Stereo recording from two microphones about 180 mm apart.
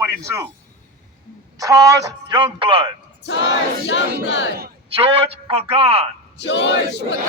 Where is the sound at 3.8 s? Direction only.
90° left.